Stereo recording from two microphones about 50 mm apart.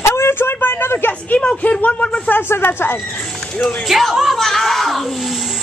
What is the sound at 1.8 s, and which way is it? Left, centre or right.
Speech, left.